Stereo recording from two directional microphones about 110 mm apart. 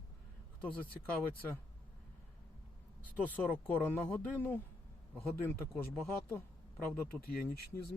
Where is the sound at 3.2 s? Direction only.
15° left (ahead or behind).